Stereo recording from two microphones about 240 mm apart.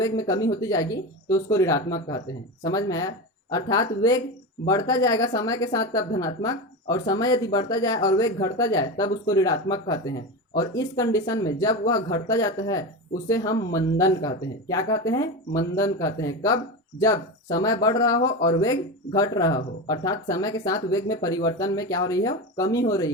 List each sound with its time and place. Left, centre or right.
0.0 s speech: centre